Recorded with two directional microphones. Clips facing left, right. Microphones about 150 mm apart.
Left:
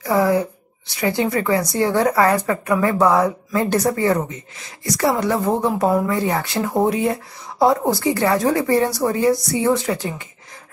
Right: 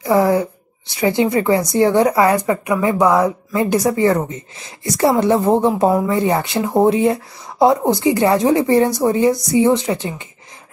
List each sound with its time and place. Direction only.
0.0 s a woman's voice: 20° right (ahead or behind)